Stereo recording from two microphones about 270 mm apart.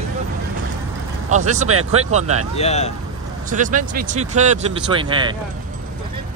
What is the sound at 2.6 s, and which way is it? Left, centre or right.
Speech, left.